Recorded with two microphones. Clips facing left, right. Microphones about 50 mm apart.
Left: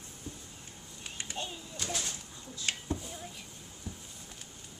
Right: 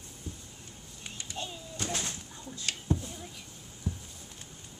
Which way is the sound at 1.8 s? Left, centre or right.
Right.